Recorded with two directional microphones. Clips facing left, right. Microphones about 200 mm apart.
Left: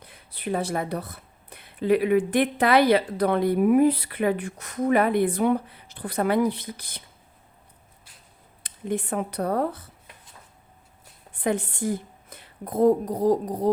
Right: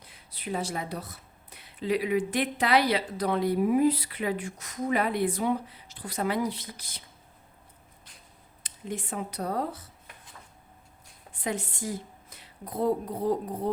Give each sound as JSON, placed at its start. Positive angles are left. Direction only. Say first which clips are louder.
{"t": 0.0, "sound": "speech", "louder": "left 6 dB", "side_deg": 55}
{"t": 8.6, "sound": "speech", "louder": "left 8 dB", "side_deg": 55}
{"t": 11.3, "sound": "a woman's voice", "louder": "left 7 dB", "side_deg": 60}